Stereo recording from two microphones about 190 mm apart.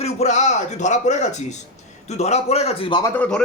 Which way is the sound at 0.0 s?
35° left (ahead or behind).